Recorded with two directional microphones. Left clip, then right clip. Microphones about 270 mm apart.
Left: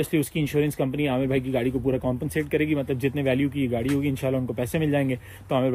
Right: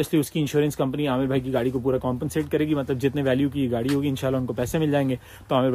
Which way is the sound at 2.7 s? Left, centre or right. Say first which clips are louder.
Right 1 dB; right.